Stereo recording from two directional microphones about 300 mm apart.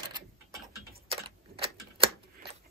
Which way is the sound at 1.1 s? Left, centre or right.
Centre.